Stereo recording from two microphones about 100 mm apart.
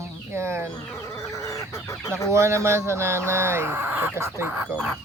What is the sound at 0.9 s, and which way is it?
Chicken, 30° left (ahead or behind).